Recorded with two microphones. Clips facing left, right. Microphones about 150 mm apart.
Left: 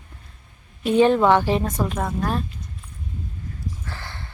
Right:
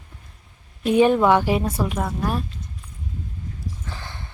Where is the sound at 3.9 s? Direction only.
15° right (ahead or behind).